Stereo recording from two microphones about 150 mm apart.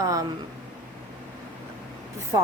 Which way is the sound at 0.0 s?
25° right (ahead or behind).